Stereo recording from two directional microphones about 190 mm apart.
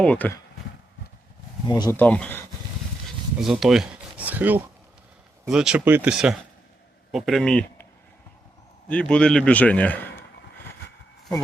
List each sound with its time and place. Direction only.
0.0 s a man's voice: 5° left (ahead or behind)
1.6 s speech: 20° left (ahead or behind)
2.0 s a man's voice: 10° left (ahead or behind)
8.9 s a man's voice: 5° left (ahead or behind)